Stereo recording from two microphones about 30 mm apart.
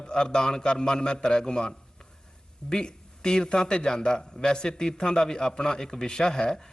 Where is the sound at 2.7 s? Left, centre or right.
Left.